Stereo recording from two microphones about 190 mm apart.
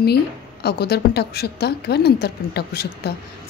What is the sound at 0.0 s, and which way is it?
A woman's voice, 55° left (ahead or behind).